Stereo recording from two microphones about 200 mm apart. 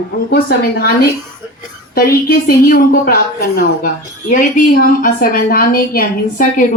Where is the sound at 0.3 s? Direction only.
50° left (ahead or behind).